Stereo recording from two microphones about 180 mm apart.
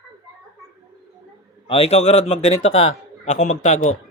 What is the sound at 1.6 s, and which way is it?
A man's voice, 35° left (ahead or behind).